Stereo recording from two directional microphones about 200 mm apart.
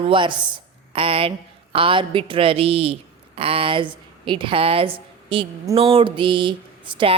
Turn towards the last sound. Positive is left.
turn(degrees=-25)  # may be behind; listen again after turning